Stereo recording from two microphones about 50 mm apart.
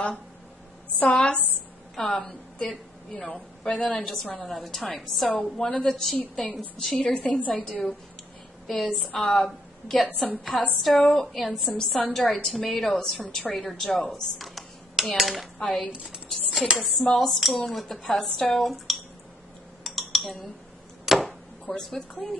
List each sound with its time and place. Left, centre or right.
1.1 s a woman's voice: centre
4.5 s a woman's voice: centre
7.2 s a woman's voice: left
7.5 s a woman's voice: centre
10.0 s a woman's voice: centre
10.8 s a woman's voice: centre
14.1 s cutlery: centre
15.9 s a sound: right
16.7 s a woman's voice: centre
19.8 s typing: centre
21.0 s a sound: centre
21.3 s speech: centre